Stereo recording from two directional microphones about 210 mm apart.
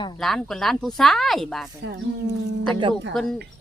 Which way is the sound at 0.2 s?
Centre (ahead or behind).